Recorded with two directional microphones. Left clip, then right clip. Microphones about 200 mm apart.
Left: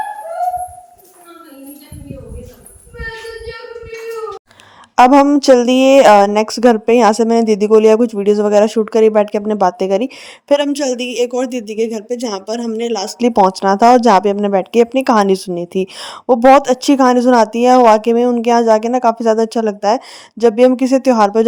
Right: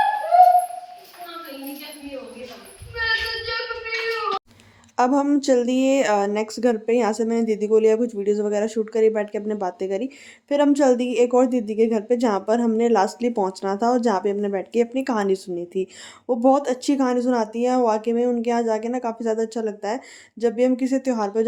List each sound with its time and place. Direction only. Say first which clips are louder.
4.9 s a woman's voice: left 11 dB; 40° left (ahead or behind)
11.9 s speech: even; 5° left (ahead or behind)
12.1 s speech: even; 40° left (ahead or behind)